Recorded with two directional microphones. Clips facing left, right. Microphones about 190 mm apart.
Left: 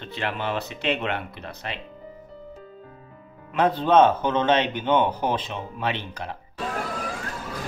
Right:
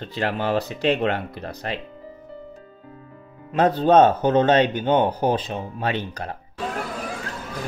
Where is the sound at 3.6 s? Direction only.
40° right (ahead or behind).